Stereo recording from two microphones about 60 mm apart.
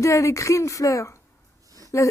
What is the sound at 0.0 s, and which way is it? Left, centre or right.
Speech, left.